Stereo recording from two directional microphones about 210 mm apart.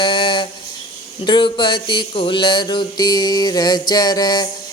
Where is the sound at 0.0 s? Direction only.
25° left (ahead or behind).